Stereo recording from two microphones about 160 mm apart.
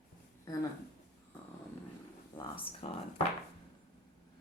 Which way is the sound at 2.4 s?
35° left (ahead or behind).